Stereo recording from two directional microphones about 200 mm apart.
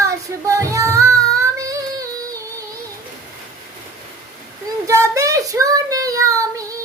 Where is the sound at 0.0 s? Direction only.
15° right (ahead or behind).